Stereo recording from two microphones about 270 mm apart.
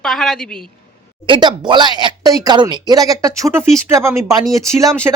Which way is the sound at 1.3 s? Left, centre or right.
Centre.